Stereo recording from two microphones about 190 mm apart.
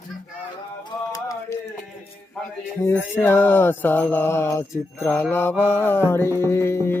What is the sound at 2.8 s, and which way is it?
Mantra, 10° left (ahead or behind).